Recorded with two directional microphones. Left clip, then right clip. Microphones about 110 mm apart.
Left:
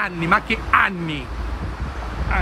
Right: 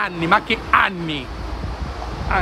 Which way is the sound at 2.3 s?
35° right (ahead or behind).